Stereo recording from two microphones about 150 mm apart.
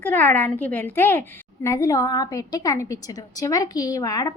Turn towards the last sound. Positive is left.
turn(degrees=25)  # may be behind; listen again after turning